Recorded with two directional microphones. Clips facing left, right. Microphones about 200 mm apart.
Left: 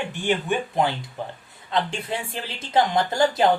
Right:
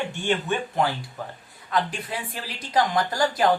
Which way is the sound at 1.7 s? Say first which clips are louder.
Left 1 dB; 25° left (ahead or behind).